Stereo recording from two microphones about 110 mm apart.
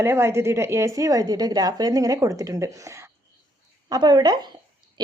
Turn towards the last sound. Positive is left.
turn(degrees=-40)  # may be behind; listen again after turning